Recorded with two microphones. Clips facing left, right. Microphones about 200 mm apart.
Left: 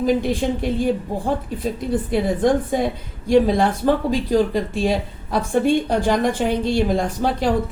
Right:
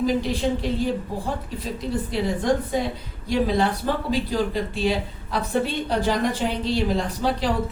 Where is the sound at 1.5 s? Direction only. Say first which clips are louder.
Left 5 dB; 50° left (ahead or behind).